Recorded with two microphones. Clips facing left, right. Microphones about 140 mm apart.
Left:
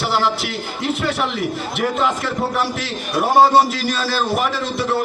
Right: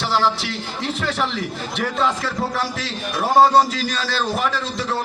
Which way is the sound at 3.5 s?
5° left (ahead or behind).